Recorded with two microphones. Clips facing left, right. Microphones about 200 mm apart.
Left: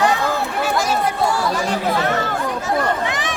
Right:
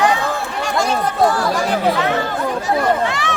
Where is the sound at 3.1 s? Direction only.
20° left (ahead or behind).